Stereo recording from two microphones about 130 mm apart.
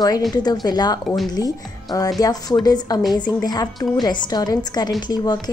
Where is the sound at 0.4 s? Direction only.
30° left (ahead or behind).